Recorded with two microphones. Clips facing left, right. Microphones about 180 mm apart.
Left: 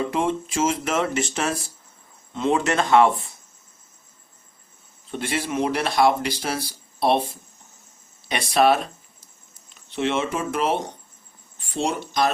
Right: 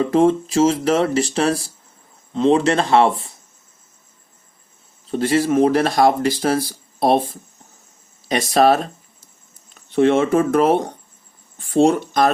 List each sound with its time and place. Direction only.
0.0 s speech: 40° right (ahead or behind)
5.1 s speech: 40° right (ahead or behind)